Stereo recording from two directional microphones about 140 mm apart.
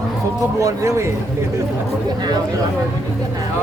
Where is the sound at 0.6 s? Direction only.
20° right (ahead or behind).